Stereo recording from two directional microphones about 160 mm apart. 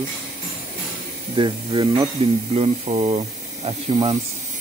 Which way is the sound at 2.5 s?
40° right (ahead or behind).